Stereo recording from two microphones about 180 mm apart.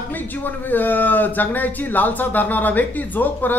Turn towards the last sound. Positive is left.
turn(degrees=10)  # may be behind; listen again after turning